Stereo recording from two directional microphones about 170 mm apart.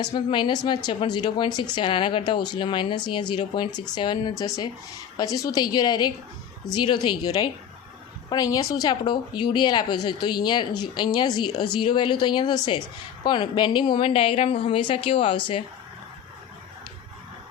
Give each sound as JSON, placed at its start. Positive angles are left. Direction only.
{"t": 0.0, "sound": "a woman's voice", "side_deg": 25}